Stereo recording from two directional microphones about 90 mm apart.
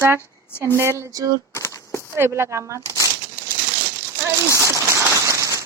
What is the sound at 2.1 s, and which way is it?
Speech, 30° right (ahead or behind).